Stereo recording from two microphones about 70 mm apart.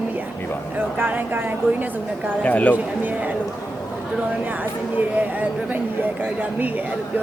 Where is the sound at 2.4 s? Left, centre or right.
Centre.